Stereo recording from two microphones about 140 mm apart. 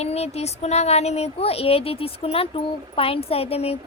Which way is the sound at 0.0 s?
50° left (ahead or behind).